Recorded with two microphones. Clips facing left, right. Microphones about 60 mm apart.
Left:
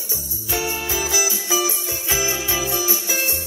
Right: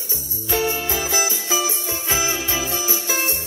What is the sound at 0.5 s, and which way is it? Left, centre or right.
Music, centre.